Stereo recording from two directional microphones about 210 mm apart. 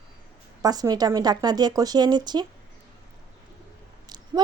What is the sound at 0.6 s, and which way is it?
Speech, 15° right (ahead or behind).